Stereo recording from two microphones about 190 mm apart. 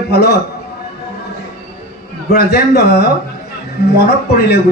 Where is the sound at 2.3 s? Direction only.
55° left (ahead or behind).